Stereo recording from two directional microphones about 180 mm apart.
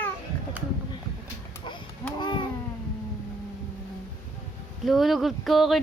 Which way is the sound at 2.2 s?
25° left (ahead or behind).